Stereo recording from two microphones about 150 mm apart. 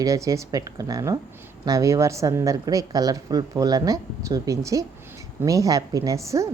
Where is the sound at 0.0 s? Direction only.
20° right (ahead or behind).